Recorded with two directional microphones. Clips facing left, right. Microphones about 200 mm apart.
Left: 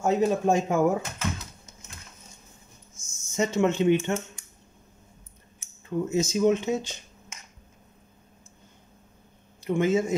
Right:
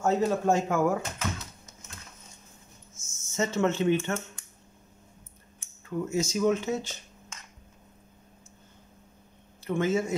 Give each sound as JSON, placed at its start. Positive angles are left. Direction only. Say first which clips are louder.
{"t": 0.0, "sound": "speech", "louder": "left 2 dB", "side_deg": 15}
{"t": 3.0, "sound": "speech", "louder": "left 3 dB", "side_deg": 15}
{"t": 5.9, "sound": "speech", "louder": "left 3 dB", "side_deg": 20}
{"t": 9.7, "sound": "speech", "louder": "left 3 dB", "side_deg": 20}